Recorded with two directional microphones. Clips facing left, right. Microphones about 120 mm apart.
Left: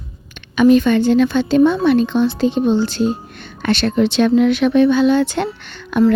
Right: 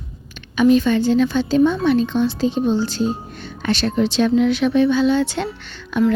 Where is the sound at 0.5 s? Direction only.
60° left (ahead or behind).